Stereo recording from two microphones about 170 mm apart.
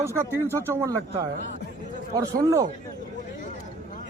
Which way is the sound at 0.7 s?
15° right (ahead or behind).